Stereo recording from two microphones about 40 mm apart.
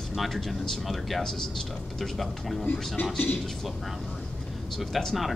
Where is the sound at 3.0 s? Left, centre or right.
Left.